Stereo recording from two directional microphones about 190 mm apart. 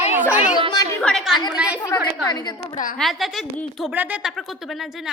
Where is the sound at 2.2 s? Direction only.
20° left (ahead or behind).